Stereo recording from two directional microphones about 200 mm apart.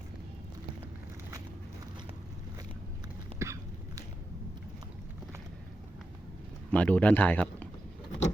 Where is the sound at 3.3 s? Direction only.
15° right (ahead or behind).